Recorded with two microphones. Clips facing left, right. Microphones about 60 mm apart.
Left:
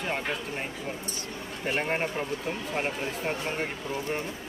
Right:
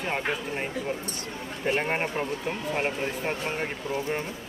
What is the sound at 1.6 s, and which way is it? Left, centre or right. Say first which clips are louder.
Speech: right 2 dB; centre.